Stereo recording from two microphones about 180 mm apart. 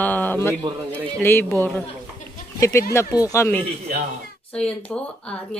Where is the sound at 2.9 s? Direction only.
20° left (ahead or behind).